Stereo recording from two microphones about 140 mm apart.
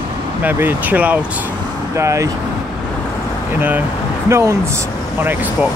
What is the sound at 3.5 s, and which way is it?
Speech, 15° right (ahead or behind).